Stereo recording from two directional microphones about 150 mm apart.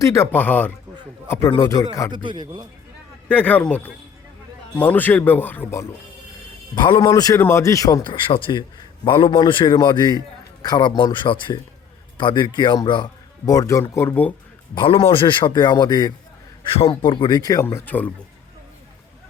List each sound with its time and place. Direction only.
0.0 s a man's voice: 20° left (ahead or behind)
2.1 s a man's voice: 30° right (ahead or behind)
3.2 s a man's voice: 10° left (ahead or behind)
6.7 s a man's voice: 30° left (ahead or behind); by 14.3 s 15° left (ahead or behind)
14.8 s a man's voice: 35° left (ahead or behind)
16.6 s a man's voice: 40° left (ahead or behind); by 18.1 s 10° left (ahead or behind)